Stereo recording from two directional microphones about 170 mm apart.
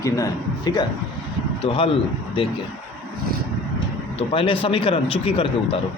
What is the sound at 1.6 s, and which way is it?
Speech, 30° left (ahead or behind).